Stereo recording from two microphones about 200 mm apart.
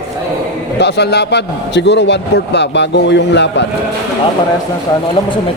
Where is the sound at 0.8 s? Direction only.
55° left (ahead or behind).